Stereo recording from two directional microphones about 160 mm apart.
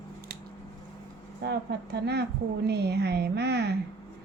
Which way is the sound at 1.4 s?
90° right.